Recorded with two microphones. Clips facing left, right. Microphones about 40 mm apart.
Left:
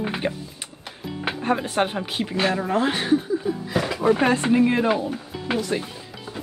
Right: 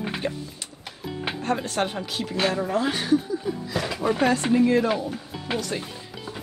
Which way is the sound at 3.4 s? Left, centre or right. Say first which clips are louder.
Left 3 dB; centre.